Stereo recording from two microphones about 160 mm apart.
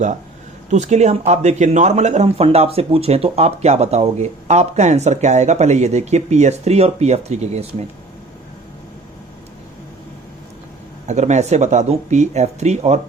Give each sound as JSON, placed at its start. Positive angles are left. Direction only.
{"t": 0.7, "sound": "speech", "side_deg": -45}
{"t": 11.0, "sound": "speech", "side_deg": -45}